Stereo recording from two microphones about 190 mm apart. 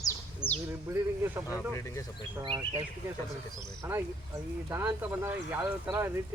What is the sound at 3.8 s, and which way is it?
Speech, 15° right (ahead or behind).